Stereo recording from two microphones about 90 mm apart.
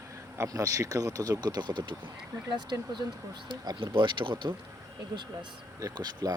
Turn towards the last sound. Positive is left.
turn(degrees=-50)  # may be behind; listen again after turning